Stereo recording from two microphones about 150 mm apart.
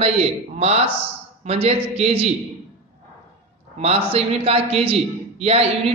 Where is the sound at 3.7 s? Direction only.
40° right (ahead or behind).